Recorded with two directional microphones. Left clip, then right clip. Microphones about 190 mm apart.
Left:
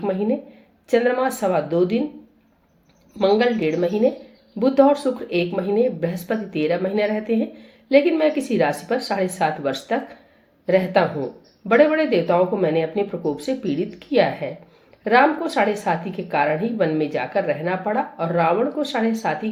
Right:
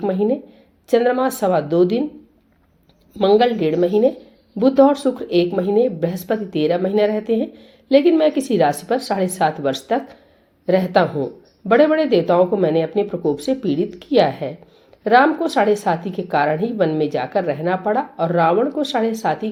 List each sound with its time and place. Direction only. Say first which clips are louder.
0.0 s speech: right 3 dB; 45° right (ahead or behind)
3.2 s speech: right 3 dB; 40° right (ahead or behind)